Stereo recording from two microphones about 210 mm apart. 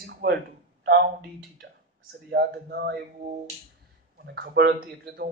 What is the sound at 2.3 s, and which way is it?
Speech, 50° right (ahead or behind).